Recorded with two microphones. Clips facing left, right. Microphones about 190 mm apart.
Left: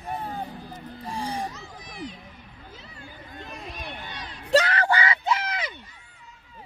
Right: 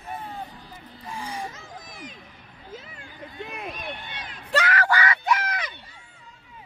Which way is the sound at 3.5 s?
60° right (ahead or behind).